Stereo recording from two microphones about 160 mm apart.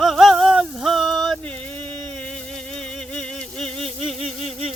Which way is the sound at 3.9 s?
Centre (ahead or behind).